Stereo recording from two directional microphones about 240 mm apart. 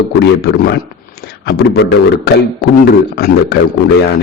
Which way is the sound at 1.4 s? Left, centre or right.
Left.